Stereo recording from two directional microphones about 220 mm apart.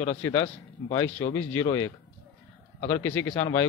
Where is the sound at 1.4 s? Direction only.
10° left (ahead or behind).